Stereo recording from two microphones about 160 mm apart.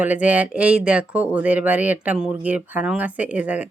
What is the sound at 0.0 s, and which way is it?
Speech, 10° right (ahead or behind).